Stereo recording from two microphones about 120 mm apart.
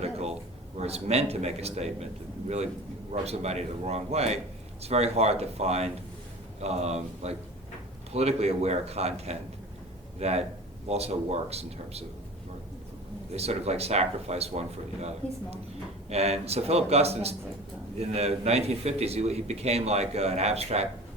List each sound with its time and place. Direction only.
0.0 s a sound: 60° right (ahead or behind)
0.8 s a man's voice: 60° right (ahead or behind)
3.1 s a man's voice: 60° right (ahead or behind)
13.3 s a man's voice: 60° right (ahead or behind)